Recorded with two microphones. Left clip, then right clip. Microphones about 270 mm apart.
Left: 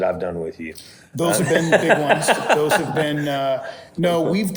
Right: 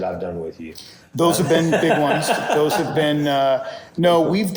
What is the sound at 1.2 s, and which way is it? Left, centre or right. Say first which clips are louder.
A man's voice: right 2 dB; centre.